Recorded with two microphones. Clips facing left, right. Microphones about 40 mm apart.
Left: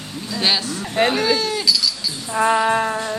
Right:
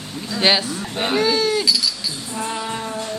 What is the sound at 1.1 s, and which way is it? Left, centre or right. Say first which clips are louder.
Speech: right 1 dB; centre.